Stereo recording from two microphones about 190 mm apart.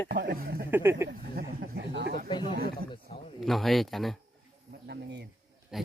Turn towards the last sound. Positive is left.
turn(degrees=0)  # may be behind; listen again after turning